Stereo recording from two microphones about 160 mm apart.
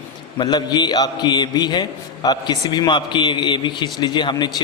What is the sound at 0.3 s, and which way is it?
A man's voice, 25° left (ahead or behind).